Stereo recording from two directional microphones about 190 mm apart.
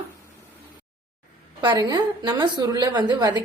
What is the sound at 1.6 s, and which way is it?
A woman's voice, 20° right (ahead or behind).